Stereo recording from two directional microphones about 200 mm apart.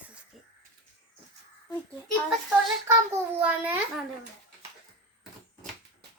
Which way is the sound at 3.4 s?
5° right (ahead or behind).